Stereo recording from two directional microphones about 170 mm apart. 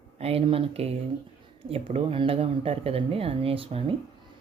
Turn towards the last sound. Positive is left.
turn(degrees=-35)  # may be behind; listen again after turning